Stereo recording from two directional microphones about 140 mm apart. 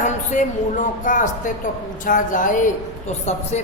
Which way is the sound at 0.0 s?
60° left (ahead or behind).